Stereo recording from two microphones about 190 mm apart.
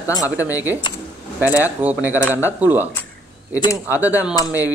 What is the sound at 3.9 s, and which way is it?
Speech, 10° right (ahead or behind).